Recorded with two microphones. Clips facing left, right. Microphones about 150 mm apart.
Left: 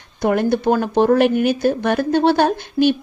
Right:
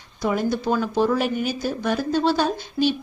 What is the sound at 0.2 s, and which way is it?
Speech, 60° left (ahead or behind).